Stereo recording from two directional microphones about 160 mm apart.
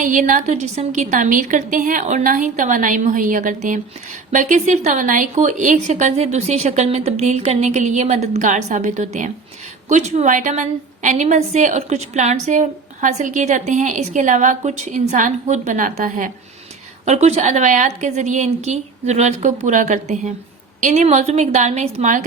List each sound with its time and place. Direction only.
0.0 s a woman's voice: 55° right (ahead or behind)
17.1 s a woman's voice: 45° right (ahead or behind)